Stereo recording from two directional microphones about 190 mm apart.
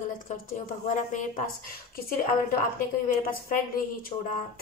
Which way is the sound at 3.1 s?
50° left (ahead or behind).